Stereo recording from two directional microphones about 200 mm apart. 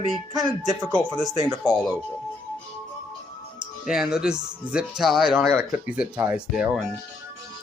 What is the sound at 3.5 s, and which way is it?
Speech, 5° right (ahead or behind).